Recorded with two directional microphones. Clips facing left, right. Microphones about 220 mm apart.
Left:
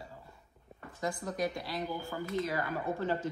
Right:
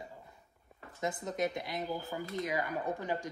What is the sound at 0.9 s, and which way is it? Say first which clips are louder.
A woman's voice: even; 20° right (ahead or behind).